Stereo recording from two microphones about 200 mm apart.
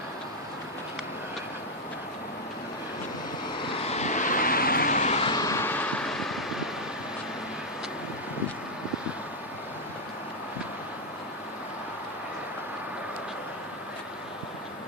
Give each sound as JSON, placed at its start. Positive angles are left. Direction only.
{"t": 3.8, "sound": "vehicle", "side_deg": 30}